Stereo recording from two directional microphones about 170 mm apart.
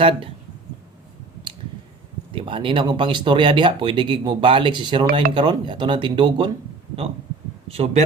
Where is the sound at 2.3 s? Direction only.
30° right (ahead or behind).